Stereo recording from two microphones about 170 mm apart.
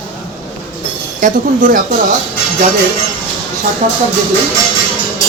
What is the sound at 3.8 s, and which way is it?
Speech, 50° right (ahead or behind).